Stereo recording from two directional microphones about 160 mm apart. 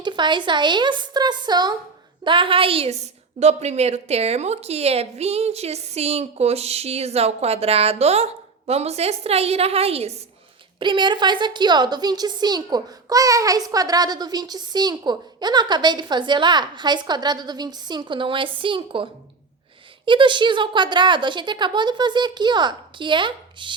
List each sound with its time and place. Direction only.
0.0 s a woman's voice: 30° right (ahead or behind)
20.1 s a woman's voice: 30° right (ahead or behind)